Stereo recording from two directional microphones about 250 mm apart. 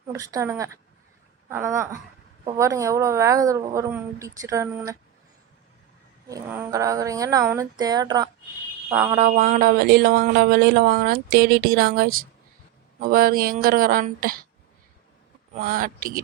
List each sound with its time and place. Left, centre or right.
0.1 s a woman's voice: centre
6.2 s a woman's voice: centre
9.1 s speech: right
15.5 s speech: right